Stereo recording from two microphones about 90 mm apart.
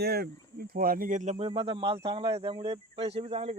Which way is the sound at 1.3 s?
90° right.